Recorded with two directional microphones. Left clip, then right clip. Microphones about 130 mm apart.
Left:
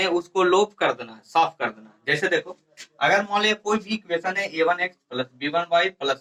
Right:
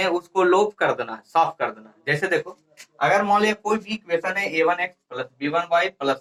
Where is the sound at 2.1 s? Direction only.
30° right (ahead or behind).